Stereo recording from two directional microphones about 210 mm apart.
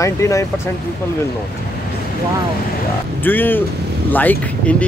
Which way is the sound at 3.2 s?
10° left (ahead or behind).